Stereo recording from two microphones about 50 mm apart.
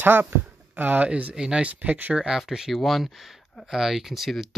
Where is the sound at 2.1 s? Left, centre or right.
Centre.